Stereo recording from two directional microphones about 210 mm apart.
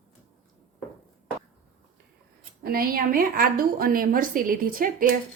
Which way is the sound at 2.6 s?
45° right (ahead or behind).